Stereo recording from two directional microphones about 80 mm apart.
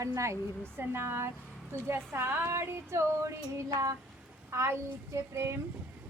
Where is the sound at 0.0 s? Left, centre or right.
Right.